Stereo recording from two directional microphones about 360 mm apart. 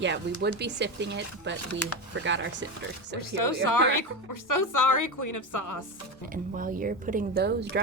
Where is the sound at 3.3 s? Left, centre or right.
Left.